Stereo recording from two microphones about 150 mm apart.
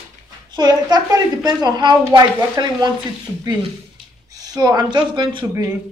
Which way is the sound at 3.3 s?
5° right (ahead or behind).